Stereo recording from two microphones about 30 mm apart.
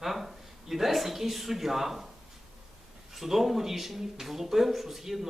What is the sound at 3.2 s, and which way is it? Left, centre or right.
A man's voice, centre.